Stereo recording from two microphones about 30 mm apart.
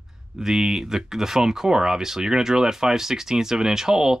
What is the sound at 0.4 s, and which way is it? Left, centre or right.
Speech, centre.